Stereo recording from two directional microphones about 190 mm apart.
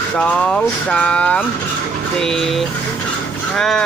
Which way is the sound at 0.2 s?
5° left (ahead or behind).